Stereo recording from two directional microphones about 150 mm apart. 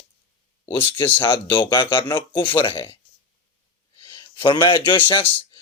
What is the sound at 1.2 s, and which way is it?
Speech, 35° left (ahead or behind).